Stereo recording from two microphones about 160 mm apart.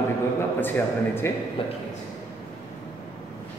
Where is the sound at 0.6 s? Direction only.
15° left (ahead or behind).